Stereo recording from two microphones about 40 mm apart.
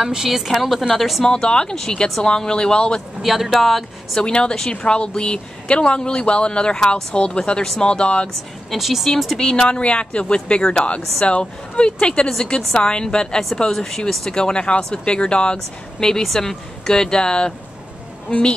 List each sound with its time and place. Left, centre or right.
0.0 s a woman's voice: centre
1.2 s speech: centre
3.2 s speech: centre
4.2 s speech: left
8.7 s speech: centre
9.4 s speech: left
13.7 s speech: centre
14.4 s speech: left